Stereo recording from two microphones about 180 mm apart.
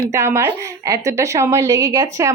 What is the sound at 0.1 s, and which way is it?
A woman's voice, 15° right (ahead or behind).